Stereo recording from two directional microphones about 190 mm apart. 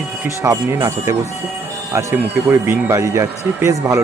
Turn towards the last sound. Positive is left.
turn(degrees=-15)  # may be behind; listen again after turning